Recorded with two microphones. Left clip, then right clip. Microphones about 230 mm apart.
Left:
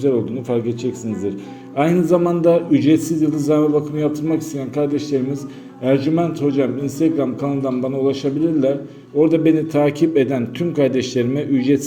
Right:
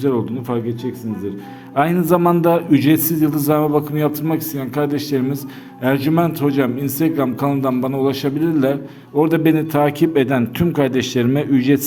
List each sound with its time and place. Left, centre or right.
0.0 s a man's voice: right
1.7 s a man's voice: right